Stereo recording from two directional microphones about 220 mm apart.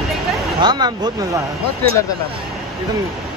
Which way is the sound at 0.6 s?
20° right (ahead or behind).